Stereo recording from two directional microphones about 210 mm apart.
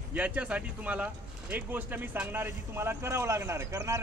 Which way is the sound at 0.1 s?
5° right (ahead or behind).